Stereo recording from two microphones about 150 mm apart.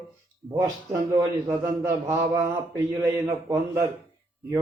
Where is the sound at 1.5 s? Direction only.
20° right (ahead or behind).